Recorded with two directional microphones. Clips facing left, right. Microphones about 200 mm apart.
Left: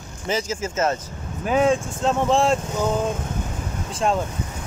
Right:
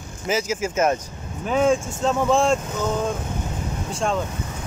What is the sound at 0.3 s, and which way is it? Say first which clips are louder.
Speech: right 2 dB; 10° right (ahead or behind).